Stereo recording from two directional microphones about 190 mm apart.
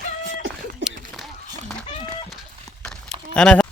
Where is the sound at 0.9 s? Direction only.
Centre (ahead or behind).